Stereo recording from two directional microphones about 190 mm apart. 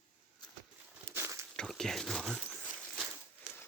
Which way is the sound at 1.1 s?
15° right (ahead or behind).